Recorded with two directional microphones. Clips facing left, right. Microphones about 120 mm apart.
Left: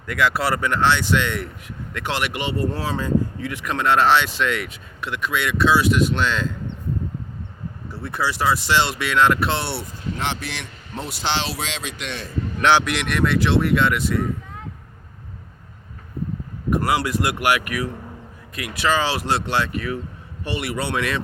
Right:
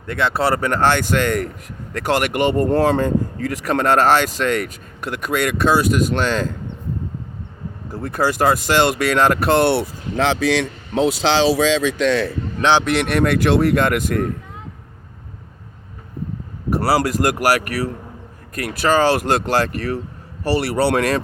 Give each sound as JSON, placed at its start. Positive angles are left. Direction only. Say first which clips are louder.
{"t": 0.0, "sound": "speech", "louder": "right 2 dB", "side_deg": -25}
{"t": 7.9, "sound": "speech", "louder": "right 5 dB", "side_deg": -45}
{"t": 12.8, "sound": "speech", "louder": "right 5 dB", "side_deg": -40}
{"t": 16.6, "sound": "speech", "louder": "right 3 dB", "side_deg": -35}